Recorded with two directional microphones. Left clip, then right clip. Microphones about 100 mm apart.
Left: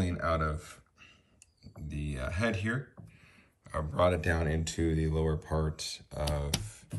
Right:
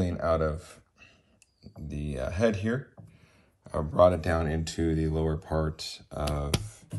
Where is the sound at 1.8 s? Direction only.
25° right (ahead or behind).